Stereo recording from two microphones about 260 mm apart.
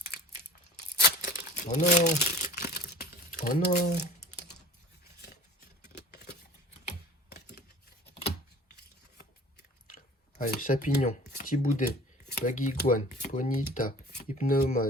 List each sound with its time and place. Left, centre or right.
0.9 s tearing: left
1.6 s crumpling: left
5.8 s a sound: left
7.3 s computer keyboard: left
9.1 s a sound: left
10.3 s speech: left